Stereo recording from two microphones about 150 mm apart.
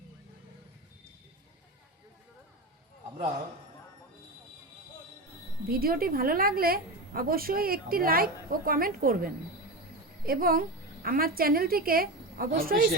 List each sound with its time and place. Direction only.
5.6 s a woman's voice: 80° right